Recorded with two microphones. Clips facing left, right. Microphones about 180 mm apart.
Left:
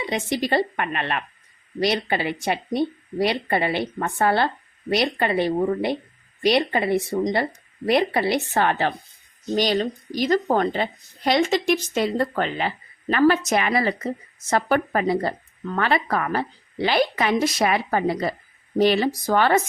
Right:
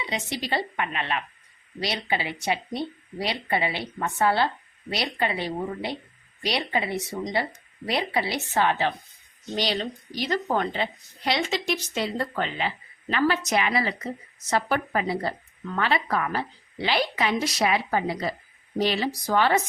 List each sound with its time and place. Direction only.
0.0 s a woman's voice: 50° left (ahead or behind)